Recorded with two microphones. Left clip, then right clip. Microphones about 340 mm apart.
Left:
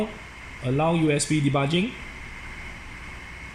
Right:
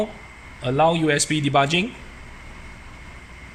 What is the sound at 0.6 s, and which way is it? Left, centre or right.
Speech, right.